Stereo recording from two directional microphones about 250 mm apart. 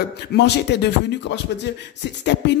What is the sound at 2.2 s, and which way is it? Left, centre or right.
Speech, left.